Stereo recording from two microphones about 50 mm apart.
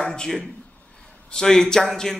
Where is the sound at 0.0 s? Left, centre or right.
Centre.